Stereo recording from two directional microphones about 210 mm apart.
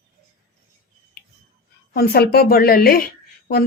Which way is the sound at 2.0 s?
50° left (ahead or behind).